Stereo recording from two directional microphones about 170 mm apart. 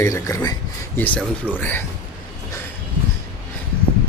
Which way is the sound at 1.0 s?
10° left (ahead or behind).